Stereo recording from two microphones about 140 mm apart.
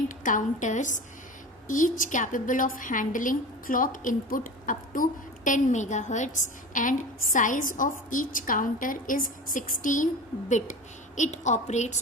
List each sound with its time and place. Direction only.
0.2 s a woman's voice: 65° left (ahead or behind)
5.5 s a woman's voice: 60° left (ahead or behind)
11.2 s a woman's voice: 60° left (ahead or behind)